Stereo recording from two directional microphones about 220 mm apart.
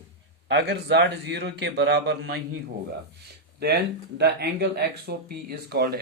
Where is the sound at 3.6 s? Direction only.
50° right (ahead or behind).